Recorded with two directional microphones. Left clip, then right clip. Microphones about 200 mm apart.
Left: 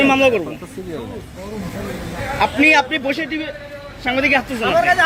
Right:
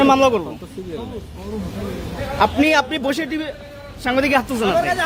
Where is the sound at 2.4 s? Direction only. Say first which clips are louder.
Left 2 dB; 25° right (ahead or behind).